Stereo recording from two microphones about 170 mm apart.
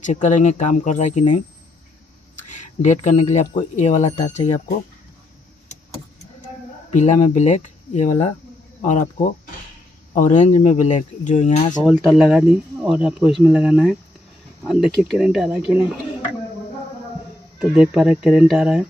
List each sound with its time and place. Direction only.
0.0 s speech: 45° left (ahead or behind)
2.5 s speech: 45° left (ahead or behind)
6.9 s speech: 45° left (ahead or behind)
10.1 s speech: 45° left (ahead or behind)
12.0 s speech: centre (ahead or behind)
17.6 s speech: 5° right (ahead or behind)